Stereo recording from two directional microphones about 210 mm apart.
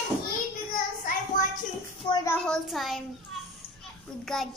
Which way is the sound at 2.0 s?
20° left (ahead or behind).